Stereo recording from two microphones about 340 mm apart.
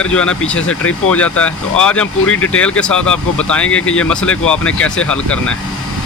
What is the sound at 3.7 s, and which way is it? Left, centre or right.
Speech, left.